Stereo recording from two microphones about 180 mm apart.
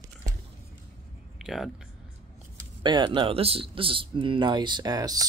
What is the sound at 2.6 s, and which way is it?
Speech, 25° right (ahead or behind).